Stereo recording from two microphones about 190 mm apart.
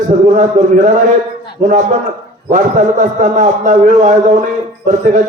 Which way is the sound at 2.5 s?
40° right (ahead or behind).